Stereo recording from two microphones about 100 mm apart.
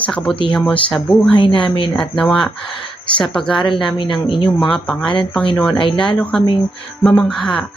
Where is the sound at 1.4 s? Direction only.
55° left (ahead or behind).